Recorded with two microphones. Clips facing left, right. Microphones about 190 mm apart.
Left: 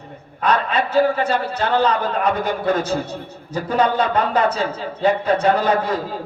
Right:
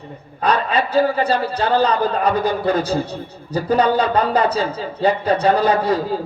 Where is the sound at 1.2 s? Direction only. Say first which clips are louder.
Right 2 dB; 35° right (ahead or behind).